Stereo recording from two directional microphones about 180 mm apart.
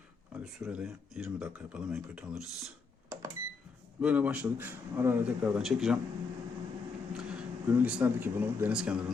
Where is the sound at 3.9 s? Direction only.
5° right (ahead or behind).